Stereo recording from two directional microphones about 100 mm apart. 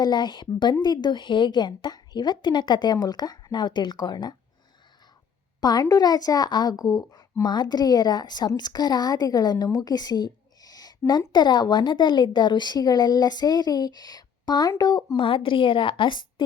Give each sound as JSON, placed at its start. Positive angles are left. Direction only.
{"t": 0.0, "sound": "speech", "side_deg": 50}
{"t": 5.5, "sound": "speech", "side_deg": 40}
{"t": 9.7, "sound": "a sound", "side_deg": 40}
{"t": 11.3, "sound": "speech", "side_deg": 50}
{"t": 15.1, "sound": "a woman's voice", "side_deg": 60}